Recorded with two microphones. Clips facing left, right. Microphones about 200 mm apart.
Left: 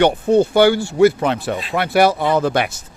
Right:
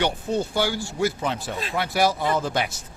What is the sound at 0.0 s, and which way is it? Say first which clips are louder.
Speech: left 11 dB; 65° left (ahead or behind).